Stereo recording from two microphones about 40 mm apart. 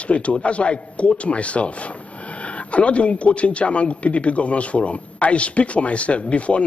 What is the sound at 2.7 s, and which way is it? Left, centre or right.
A man's voice, left.